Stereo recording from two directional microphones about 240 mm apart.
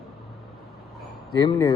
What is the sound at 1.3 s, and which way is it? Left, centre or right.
Speech, centre.